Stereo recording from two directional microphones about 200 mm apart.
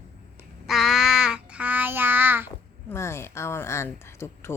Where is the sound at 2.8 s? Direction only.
15° left (ahead or behind).